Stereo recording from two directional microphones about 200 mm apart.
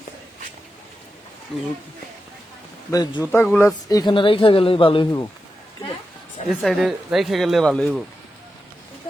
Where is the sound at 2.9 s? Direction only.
20° left (ahead or behind).